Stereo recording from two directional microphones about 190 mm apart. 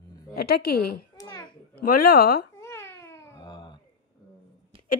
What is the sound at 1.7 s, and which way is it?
Speech, 50° left (ahead or behind).